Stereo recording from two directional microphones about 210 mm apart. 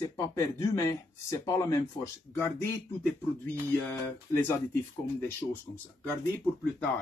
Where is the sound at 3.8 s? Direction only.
10° left (ahead or behind).